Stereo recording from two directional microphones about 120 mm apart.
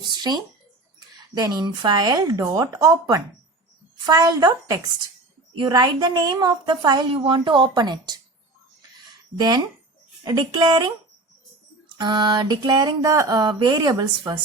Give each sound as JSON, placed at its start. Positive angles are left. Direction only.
{"t": 0.1, "sound": "a sound", "side_deg": -35}
{"t": 1.4, "sound": "a woman's voice", "side_deg": -35}
{"t": 10.2, "sound": "a woman's voice", "side_deg": -35}
{"t": 11.9, "sound": "a woman's voice", "side_deg": -40}